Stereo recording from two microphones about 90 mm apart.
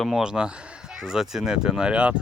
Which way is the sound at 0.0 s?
5° right (ahead or behind).